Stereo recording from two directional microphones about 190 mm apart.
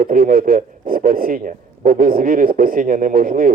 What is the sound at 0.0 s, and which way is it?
A man's voice, 50° right (ahead or behind).